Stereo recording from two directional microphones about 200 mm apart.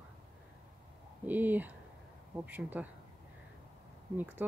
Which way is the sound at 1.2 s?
10° right (ahead or behind).